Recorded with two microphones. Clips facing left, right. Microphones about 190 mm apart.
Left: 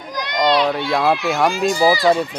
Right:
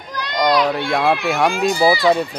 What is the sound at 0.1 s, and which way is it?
Children playing, 15° left (ahead or behind).